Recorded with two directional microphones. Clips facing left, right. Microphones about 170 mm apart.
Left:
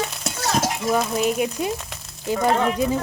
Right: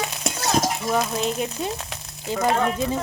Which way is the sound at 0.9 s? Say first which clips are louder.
Left 3 dB; 5° left (ahead or behind).